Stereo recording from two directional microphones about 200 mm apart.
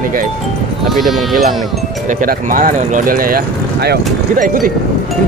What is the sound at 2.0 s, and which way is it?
Speech, 45° right (ahead or behind).